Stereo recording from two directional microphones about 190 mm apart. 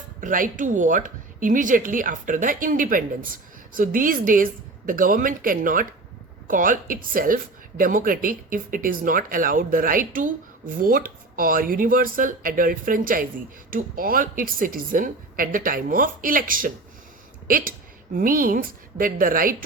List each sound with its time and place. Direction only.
0.2 s a woman's voice: 45° right (ahead or behind)